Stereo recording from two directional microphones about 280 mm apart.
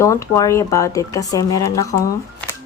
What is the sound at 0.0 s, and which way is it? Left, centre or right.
Speech, centre.